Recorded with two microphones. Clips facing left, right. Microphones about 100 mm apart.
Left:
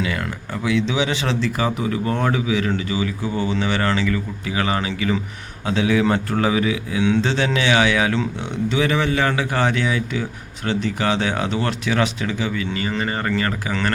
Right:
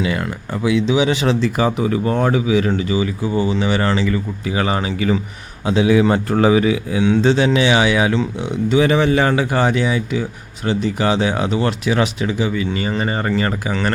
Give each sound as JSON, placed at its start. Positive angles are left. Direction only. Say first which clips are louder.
{"t": 0.0, "sound": "speech", "louder": "right 4 dB", "side_deg": -20}
{"t": 3.3, "sound": "speech", "louder": "right 4 dB", "side_deg": -10}
{"t": 5.6, "sound": "speech", "louder": "right 4 dB", "side_deg": -10}
{"t": 6.5, "sound": "speech", "louder": "right 5 dB", "side_deg": -30}
{"t": 7.0, "sound": "speech", "louder": "right 5 dB", "side_deg": -10}
{"t": 8.8, "sound": "speech", "louder": "right 5 dB", "side_deg": -25}
{"t": 9.5, "sound": "speech", "louder": "right 3 dB", "side_deg": -10}